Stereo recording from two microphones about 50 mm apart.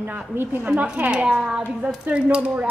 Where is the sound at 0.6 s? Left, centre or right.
Right.